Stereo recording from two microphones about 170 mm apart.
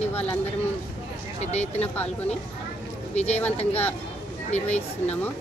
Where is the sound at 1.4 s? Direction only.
40° left (ahead or behind).